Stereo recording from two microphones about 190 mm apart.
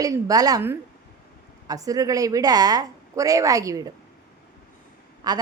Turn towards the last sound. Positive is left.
turn(degrees=-20)  # may be behind; listen again after turning